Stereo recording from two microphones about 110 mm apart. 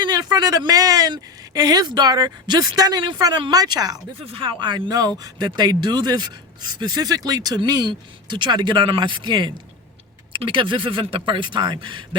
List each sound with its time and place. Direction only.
0.0 s speech: 40° right (ahead or behind)
4.3 s speech: 50° right (ahead or behind)